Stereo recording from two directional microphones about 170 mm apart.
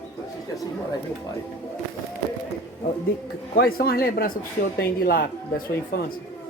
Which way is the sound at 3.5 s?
60° left (ahead or behind).